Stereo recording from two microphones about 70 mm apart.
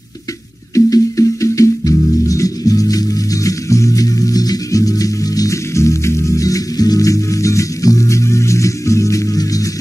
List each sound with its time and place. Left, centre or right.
0.7 s music: left